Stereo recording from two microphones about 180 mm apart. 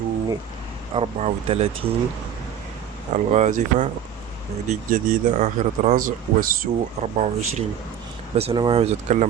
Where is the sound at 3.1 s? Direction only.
40° right (ahead or behind).